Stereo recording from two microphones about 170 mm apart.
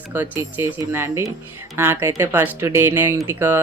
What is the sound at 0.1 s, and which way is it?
Speech, 10° right (ahead or behind).